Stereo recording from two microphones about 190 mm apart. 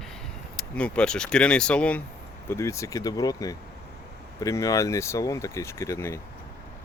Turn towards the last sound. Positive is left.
turn(degrees=15)  # may be behind; listen again after turning